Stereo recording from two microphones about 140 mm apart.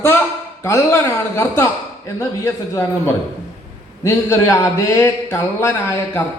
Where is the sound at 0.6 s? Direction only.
20° left (ahead or behind).